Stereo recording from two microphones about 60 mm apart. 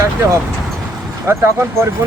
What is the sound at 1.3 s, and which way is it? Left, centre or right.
Speech, right.